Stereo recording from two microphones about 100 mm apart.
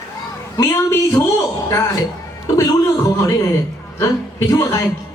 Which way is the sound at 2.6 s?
35° left (ahead or behind).